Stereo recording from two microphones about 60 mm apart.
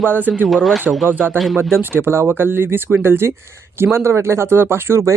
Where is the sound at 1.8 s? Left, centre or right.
Right.